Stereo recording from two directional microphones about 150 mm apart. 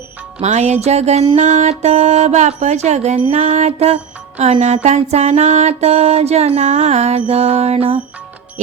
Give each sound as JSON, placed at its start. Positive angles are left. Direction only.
{"t": 0.3, "sound": "music", "side_deg": -45}